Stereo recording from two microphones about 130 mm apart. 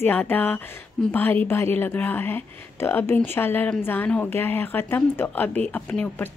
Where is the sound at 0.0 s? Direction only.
15° left (ahead or behind).